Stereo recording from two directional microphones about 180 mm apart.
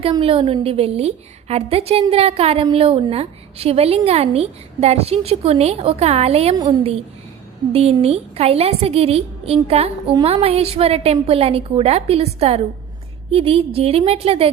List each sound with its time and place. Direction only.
0.1 s a woman's voice: 30° right (ahead or behind)